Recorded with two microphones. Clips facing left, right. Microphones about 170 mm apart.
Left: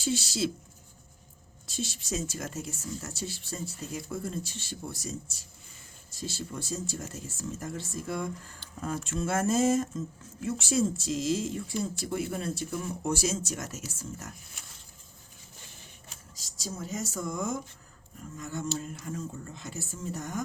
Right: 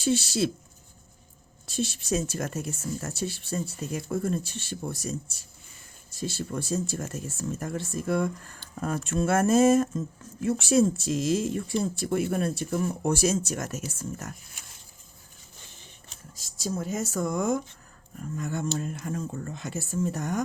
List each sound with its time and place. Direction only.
0.0 s speech: 60° right (ahead or behind)
1.6 s speech: 60° right (ahead or behind)
16.3 s speech: 55° right (ahead or behind)